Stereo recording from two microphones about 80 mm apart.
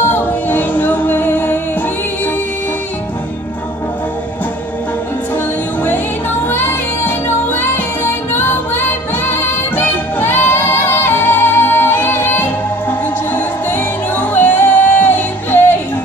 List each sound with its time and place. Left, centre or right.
0.0 s music: left
6.5 s music: left